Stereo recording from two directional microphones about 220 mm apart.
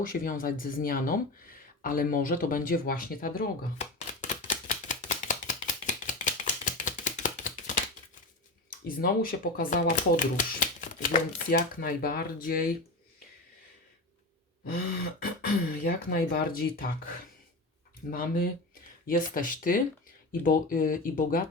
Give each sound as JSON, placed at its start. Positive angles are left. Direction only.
{"t": 0.0, "sound": "a sound", "side_deg": 40}
{"t": 8.9, "sound": "speech", "side_deg": 40}
{"t": 15.2, "sound": "speech", "side_deg": 40}
{"t": 18.1, "sound": "speech", "side_deg": 40}